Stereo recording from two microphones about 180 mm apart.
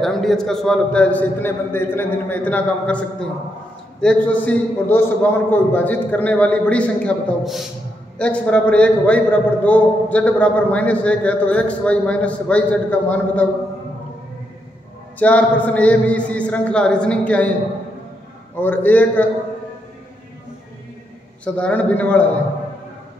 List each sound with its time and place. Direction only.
0.0 s a man's voice: centre (ahead or behind)
15.1 s a man's voice: 10° left (ahead or behind)
18.6 s a man's voice: 10° left (ahead or behind)
21.5 s a man's voice: 5° left (ahead or behind)